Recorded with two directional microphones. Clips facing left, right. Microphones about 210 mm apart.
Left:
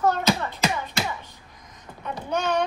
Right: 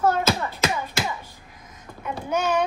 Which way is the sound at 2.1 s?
5° right (ahead or behind).